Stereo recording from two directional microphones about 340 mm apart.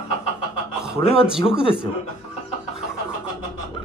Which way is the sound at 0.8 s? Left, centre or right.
Centre.